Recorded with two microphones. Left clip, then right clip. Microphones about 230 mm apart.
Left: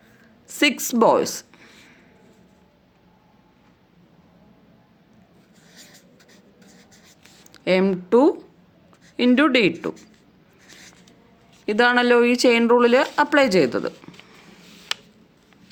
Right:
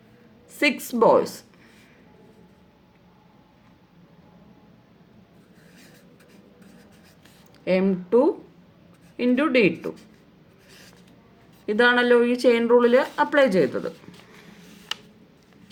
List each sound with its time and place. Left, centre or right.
0.4 s a woman's voice: left
7.5 s speech: left
11.6 s speech: left